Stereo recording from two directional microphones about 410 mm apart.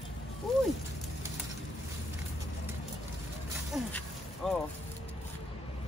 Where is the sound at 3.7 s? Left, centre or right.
Centre.